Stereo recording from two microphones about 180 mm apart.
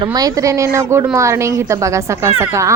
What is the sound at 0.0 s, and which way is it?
A woman's voice, 20° right (ahead or behind).